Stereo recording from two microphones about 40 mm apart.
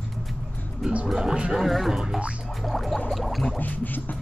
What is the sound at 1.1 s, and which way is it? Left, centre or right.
Speech, centre.